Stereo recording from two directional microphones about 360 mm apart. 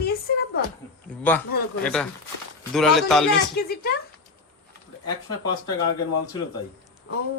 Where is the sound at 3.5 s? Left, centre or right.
Left.